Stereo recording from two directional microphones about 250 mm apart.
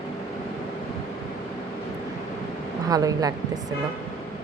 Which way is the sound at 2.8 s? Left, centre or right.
Centre.